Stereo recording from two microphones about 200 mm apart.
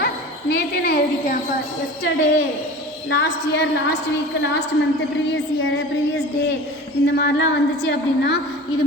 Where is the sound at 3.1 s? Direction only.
60° left (ahead or behind).